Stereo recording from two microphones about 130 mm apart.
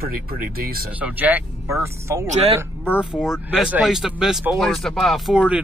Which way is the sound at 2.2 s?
55° right (ahead or behind).